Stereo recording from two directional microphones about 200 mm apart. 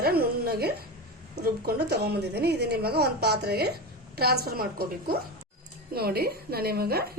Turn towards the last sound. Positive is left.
turn(degrees=-50)  # may be behind; listen again after turning